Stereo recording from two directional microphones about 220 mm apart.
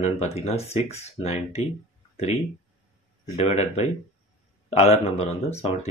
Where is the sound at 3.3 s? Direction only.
30° left (ahead or behind).